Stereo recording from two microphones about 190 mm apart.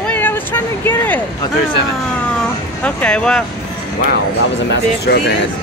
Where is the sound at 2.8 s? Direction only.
5° left (ahead or behind).